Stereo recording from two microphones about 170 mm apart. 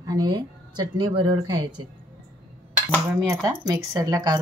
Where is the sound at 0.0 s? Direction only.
25° right (ahead or behind).